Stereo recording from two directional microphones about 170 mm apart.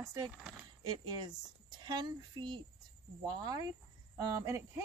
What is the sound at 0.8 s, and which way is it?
Speech, 25° right (ahead or behind).